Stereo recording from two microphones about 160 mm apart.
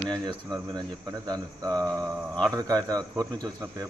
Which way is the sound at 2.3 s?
5° left (ahead or behind).